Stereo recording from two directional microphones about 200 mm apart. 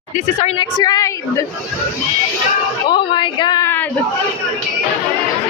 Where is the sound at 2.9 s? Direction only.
25° left (ahead or behind).